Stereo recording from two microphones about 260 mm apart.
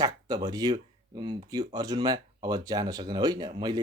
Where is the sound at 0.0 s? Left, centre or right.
Centre.